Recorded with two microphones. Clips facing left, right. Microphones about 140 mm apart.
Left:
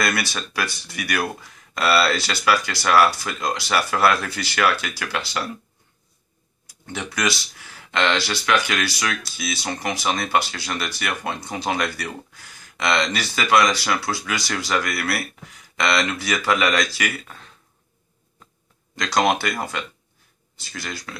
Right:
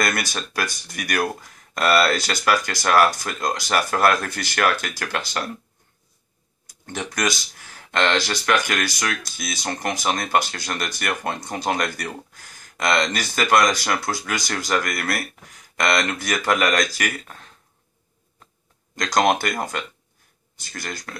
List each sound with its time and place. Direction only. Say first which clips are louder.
0.0 s speech: even; 45° right (ahead or behind)
6.7 s speech: right 1 dB; 45° right (ahead or behind)
18.9 s speech: right 1 dB; 45° right (ahead or behind)